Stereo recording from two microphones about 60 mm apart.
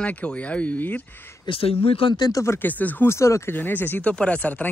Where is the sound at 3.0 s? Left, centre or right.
Left.